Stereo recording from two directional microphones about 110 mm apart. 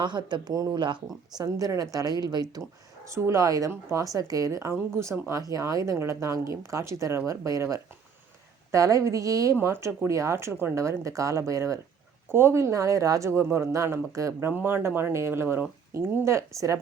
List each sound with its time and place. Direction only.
0.0 s a woman's voice: 45° right (ahead or behind); by 16.8 s 30° right (ahead or behind)